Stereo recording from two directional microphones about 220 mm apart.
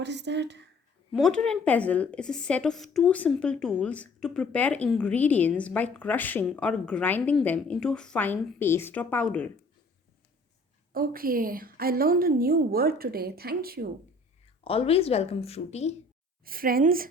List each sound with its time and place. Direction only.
0.0 s a woman's voice: 50° right (ahead or behind)
1.1 s a woman's voice: centre (ahead or behind)
10.9 s a woman's voice: 40° right (ahead or behind)
14.6 s speech: 25° left (ahead or behind)
16.4 s a woman's voice: 40° right (ahead or behind)